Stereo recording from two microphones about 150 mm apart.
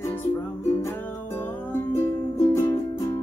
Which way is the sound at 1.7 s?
15° left (ahead or behind).